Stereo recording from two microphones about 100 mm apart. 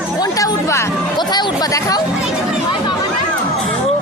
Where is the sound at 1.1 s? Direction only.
45° left (ahead or behind).